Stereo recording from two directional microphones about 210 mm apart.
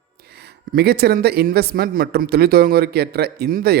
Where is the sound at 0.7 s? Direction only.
50° right (ahead or behind).